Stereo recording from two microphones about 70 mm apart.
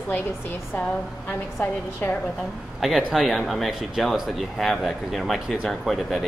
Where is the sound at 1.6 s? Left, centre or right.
Left.